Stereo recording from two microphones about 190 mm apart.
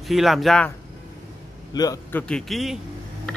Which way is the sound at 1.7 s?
20° left (ahead or behind).